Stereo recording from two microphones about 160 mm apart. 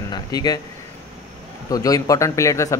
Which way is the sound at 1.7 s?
20° left (ahead or behind).